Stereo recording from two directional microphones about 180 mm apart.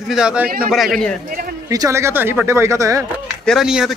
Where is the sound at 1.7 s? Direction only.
20° right (ahead or behind).